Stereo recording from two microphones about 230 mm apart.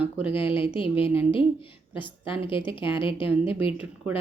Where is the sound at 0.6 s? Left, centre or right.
Left.